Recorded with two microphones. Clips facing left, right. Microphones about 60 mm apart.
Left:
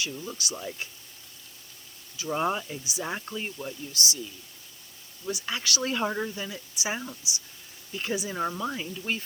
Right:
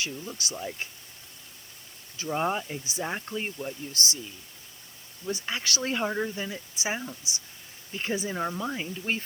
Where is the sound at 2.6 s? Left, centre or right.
Right.